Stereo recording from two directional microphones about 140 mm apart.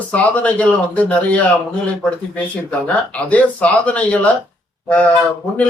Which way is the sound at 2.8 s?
10° left (ahead or behind).